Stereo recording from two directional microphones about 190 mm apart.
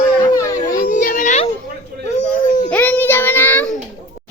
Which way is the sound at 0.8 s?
45° left (ahead or behind).